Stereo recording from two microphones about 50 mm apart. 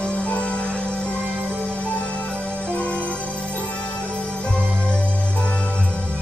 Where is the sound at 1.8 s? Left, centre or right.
Left.